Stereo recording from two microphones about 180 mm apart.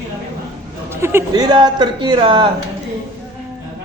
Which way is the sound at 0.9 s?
15° right (ahead or behind).